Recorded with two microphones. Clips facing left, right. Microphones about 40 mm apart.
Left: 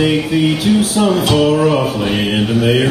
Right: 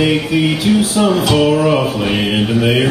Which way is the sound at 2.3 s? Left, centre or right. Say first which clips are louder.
Left 1 dB; centre.